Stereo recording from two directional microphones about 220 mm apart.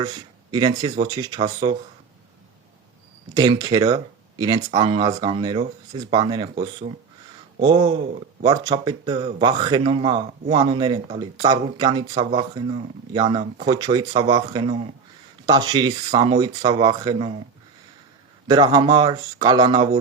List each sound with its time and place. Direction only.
0.0 s speech: 20° right (ahead or behind)
3.3 s speech: 20° right (ahead or behind)
7.6 s speech: 20° right (ahead or behind)
18.4 s speech: 20° right (ahead or behind)